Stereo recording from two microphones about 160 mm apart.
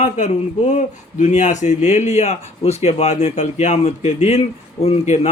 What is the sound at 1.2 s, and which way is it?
A man's voice, 50° left (ahead or behind).